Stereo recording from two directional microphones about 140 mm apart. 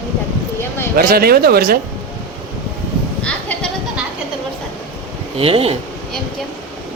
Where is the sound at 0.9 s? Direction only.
90° right.